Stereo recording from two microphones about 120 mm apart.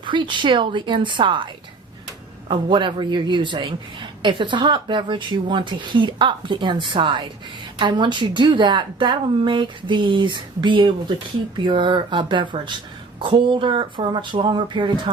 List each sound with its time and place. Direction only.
0.0 s a woman's voice: 40° right (ahead or behind)
2.5 s a woman's voice: 45° right (ahead or behind)